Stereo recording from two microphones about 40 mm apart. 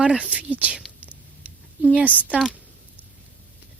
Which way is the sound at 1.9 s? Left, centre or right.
Right.